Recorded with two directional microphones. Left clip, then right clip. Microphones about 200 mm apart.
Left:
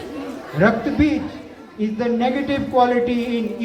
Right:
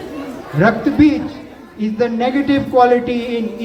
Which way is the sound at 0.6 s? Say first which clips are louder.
Right 5 dB; 20° right (ahead or behind).